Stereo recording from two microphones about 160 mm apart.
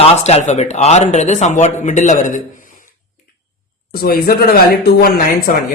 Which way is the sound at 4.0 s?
75° left (ahead or behind).